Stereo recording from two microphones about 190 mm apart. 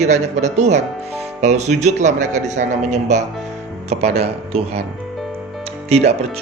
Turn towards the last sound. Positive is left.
turn(degrees=-35)  # may be behind; listen again after turning